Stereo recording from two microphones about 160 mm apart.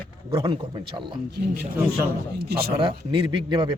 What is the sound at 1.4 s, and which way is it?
Speech, 90° right.